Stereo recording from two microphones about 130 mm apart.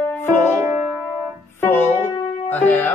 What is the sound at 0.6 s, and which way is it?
Music, 10° right (ahead or behind).